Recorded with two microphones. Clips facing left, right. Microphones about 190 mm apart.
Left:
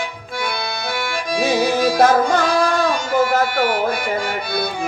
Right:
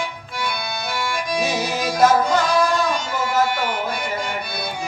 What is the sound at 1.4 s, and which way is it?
Music, 55° left (ahead or behind).